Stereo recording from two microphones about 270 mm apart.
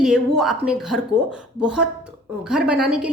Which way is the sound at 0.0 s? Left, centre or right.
Centre.